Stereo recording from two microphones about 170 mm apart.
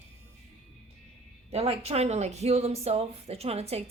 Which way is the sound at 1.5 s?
35° right (ahead or behind).